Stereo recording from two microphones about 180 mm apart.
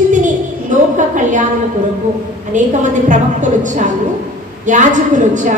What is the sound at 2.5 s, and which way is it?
Speech, 45° right (ahead or behind).